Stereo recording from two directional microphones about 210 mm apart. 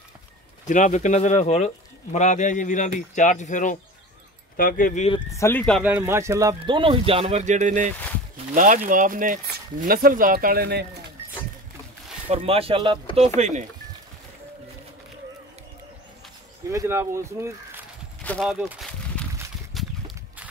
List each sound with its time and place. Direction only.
0.7 s speech: 35° left (ahead or behind)
5.3 s speech: 10° left (ahead or behind)
5.8 s speech: 5° right (ahead or behind)
6.6 s speech: 25° right (ahead or behind); by 10.9 s 50° right (ahead or behind)
12.3 s speech: 25° right (ahead or behind)
13.4 s speech: 35° right (ahead or behind)
16.7 s speech: 10° right (ahead or behind)
18.2 s speech: 5° left (ahead or behind)
19.7 s a sound: centre (ahead or behind)